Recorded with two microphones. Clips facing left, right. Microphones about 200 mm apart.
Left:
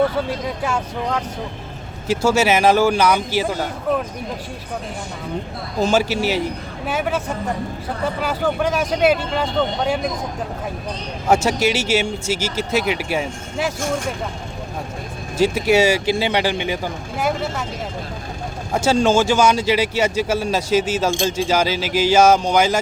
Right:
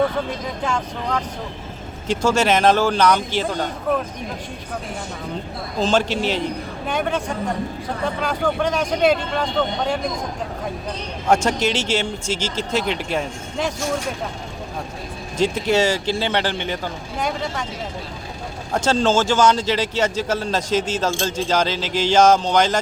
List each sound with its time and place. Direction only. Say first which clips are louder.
0.6 s speech: left 2 dB; 5° left (ahead or behind)
5.8 s speech: left 1 dB; 10° left (ahead or behind)
11.3 s speech: left 1 dB; 10° left (ahead or behind)
15.4 s speech: left 3 dB; 10° left (ahead or behind)
18.7 s speech: left 2 dB; 10° left (ahead or behind)